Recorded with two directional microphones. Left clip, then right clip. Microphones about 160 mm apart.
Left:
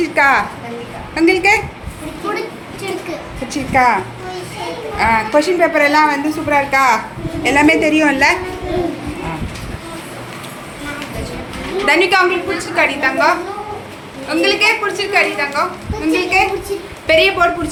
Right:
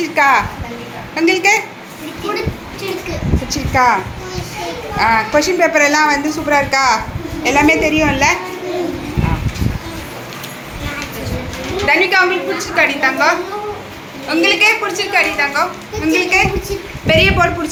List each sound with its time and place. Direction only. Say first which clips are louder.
0.0 s a woman's voice: even; 25° left (ahead or behind)
1.1 s a woman's voice: even; 15° left (ahead or behind)
3.7 s a woman's voice: even; 20° left (ahead or behind)
7.4 s a woman's voice: even; 20° left (ahead or behind)
11.9 s a woman's voice: even; 35° left (ahead or behind)
12.7 s a woman's voice: right 1 dB; 5° left (ahead or behind)
14.3 s a woman's voice: right 2 dB; 5° right (ahead or behind)